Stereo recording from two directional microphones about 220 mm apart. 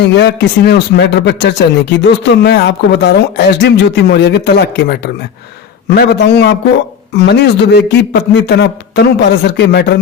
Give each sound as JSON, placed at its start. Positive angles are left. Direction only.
{"t": 0.0, "sound": "speech", "side_deg": 55}